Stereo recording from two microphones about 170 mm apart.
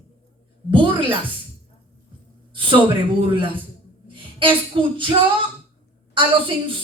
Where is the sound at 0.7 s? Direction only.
30° right (ahead or behind).